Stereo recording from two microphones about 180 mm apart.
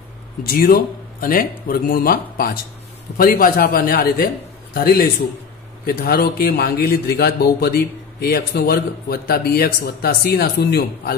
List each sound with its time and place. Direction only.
0.4 s a man's voice: 55° left (ahead or behind)